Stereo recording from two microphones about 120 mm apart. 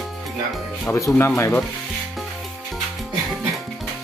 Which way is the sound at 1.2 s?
20° left (ahead or behind).